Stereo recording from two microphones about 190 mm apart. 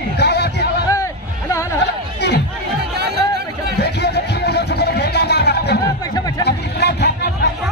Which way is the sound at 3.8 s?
60° left (ahead or behind).